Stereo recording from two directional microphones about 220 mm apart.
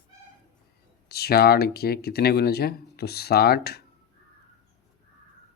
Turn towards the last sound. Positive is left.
turn(degrees=45)  # may be behind; listen again after turning